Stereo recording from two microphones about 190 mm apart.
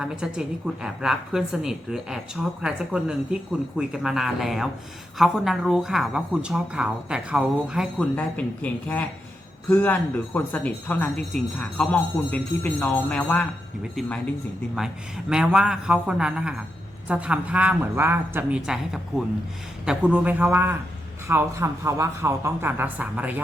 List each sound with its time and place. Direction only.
0.0 s a woman's voice: 5° right (ahead or behind)
8.1 s speech: 10° left (ahead or behind)
15.3 s a woman's voice: 5° right (ahead or behind)